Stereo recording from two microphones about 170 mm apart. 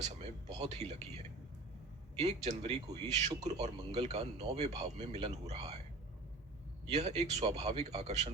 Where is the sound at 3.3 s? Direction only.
20° right (ahead or behind).